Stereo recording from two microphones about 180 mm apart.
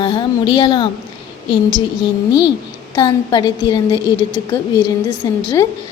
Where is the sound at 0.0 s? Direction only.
25° left (ahead or behind).